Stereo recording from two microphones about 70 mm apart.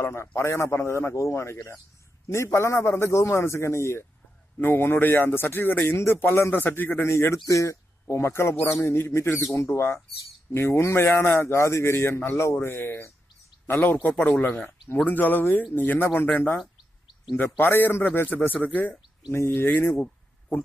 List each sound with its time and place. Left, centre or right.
0.0 s a man's voice: left
7.4 s a man's voice: left
19.9 s a sound: left